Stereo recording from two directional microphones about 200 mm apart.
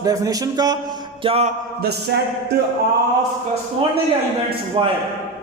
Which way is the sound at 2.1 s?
55° right (ahead or behind).